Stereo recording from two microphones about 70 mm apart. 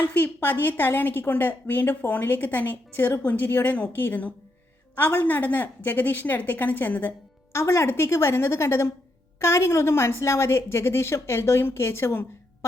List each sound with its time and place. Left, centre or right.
0.0 s a woman's voice: left
7.5 s a woman's voice: left